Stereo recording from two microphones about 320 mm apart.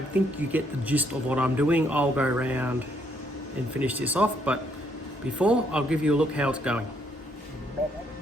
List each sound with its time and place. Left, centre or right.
0.1 s speech: centre
3.8 s speech: centre